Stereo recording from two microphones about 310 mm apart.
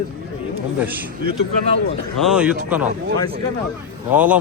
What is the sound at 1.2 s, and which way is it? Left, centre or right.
Speech, right.